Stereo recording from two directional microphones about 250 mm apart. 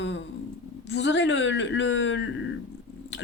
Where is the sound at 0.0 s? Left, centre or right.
Left.